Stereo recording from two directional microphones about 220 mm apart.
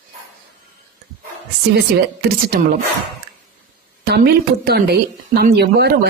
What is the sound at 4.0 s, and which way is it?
Speech, 45° right (ahead or behind).